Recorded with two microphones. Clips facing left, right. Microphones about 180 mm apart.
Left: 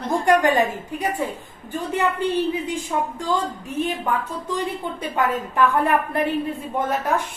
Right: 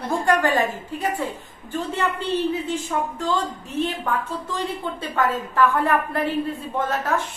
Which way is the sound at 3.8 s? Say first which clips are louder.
Even; 10° left (ahead or behind).